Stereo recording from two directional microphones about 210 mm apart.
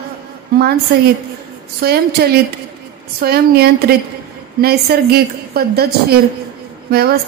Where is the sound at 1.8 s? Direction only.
45° right (ahead or behind).